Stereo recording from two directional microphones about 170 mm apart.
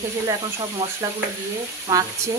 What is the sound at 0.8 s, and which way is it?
Speech, 20° right (ahead or behind).